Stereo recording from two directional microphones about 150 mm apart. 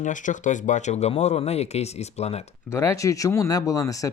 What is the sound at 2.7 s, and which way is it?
Speech, 20° left (ahead or behind).